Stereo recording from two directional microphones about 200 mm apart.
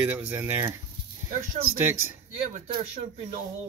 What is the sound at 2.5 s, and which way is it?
Speech, 30° right (ahead or behind).